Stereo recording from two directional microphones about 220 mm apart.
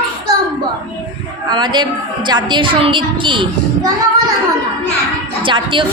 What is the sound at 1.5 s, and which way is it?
A woman's voice, 20° right (ahead or behind).